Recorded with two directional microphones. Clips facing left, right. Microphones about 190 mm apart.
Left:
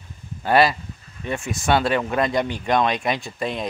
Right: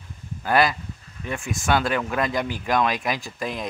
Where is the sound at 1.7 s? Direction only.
25° left (ahead or behind).